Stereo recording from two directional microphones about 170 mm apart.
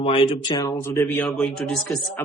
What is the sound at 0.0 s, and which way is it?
Speech, 35° left (ahead or behind).